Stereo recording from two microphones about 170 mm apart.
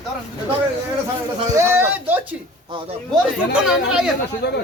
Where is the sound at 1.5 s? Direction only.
15° right (ahead or behind).